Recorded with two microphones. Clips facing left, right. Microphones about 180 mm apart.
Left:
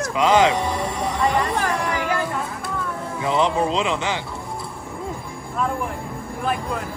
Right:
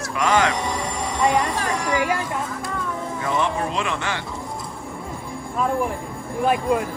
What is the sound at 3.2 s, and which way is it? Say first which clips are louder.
Speech: left 4 dB; 20° left (ahead or behind).